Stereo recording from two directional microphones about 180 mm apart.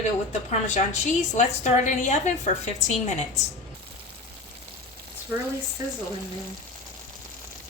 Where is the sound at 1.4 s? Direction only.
40° left (ahead or behind).